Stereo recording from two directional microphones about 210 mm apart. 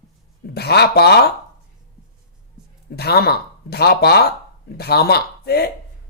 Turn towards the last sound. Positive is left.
turn(degrees=50)  # may be behind; listen again after turning